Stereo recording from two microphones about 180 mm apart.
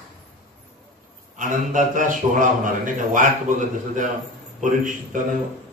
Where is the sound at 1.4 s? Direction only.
45° right (ahead or behind).